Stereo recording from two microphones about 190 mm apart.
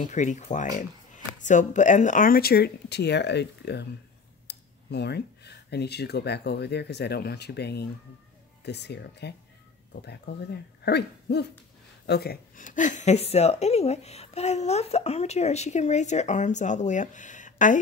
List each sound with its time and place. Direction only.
0.1 s a woman's voice: 40° left (ahead or behind)